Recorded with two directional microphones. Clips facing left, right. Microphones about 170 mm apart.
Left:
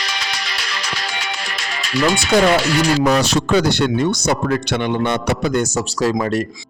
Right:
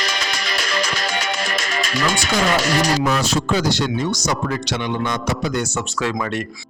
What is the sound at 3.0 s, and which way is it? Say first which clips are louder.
Speech: left 4 dB; 75° left (ahead or behind).